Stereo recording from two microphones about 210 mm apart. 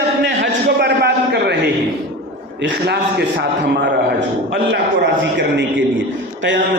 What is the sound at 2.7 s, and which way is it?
Speech, 50° right (ahead or behind).